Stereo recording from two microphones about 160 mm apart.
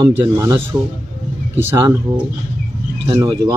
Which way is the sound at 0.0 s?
20° right (ahead or behind).